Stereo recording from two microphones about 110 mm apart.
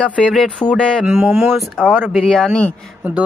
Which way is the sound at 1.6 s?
Centre (ahead or behind).